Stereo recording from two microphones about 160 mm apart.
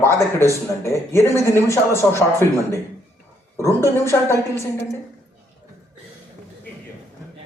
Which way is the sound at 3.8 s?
15° left (ahead or behind).